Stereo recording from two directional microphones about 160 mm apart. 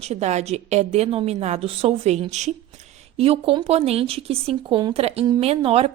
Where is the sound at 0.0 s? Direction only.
45° right (ahead or behind).